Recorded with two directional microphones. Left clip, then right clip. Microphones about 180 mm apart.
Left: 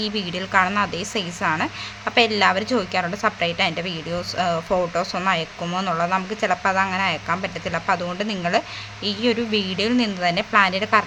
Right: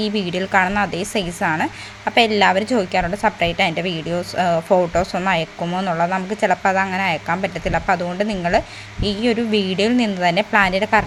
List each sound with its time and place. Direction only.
0.0 s a woman's voice: 20° right (ahead or behind)